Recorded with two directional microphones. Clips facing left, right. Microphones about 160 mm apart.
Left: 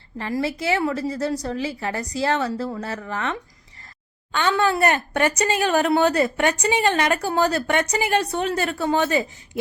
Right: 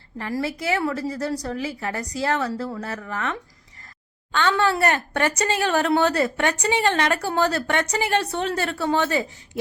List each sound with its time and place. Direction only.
0.2 s a woman's voice: 25° left (ahead or behind)
4.4 s a woman's voice: 15° left (ahead or behind)